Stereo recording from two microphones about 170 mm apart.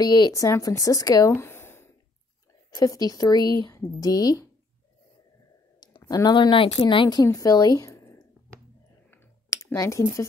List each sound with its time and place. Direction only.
0.0 s a woman's voice: 25° left (ahead or behind)
5.8 s a sound: 25° left (ahead or behind)
6.8 s a woman's voice: 30° left (ahead or behind)
9.1 s clicking: 15° left (ahead or behind)